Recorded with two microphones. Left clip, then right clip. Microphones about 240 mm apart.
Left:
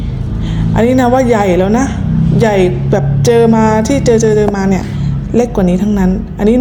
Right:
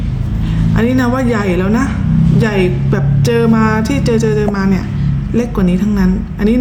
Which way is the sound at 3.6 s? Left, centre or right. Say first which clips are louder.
Left 4 dB; right.